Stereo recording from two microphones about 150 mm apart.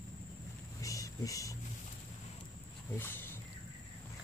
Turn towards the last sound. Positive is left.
turn(degrees=15)  # may be behind; listen again after turning